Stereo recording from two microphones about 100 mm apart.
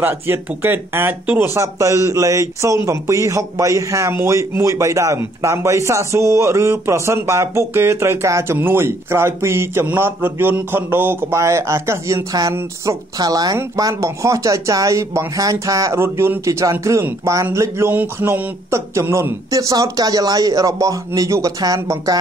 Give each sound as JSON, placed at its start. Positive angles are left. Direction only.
{"t": 0.0, "sound": "a man's voice", "side_deg": -20}
{"t": 1.5, "sound": "a man's voice", "side_deg": -30}
{"t": 17.9, "sound": "a sound", "side_deg": -20}
{"t": 18.7, "sound": "speech", "side_deg": -30}